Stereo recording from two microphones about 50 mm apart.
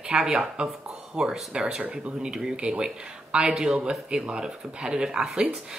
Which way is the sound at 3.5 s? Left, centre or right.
Centre.